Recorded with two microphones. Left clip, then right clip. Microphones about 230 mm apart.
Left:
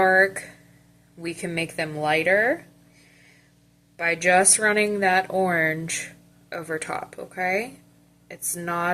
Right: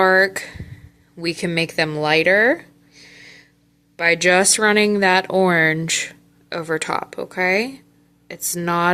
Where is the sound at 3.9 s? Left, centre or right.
Right.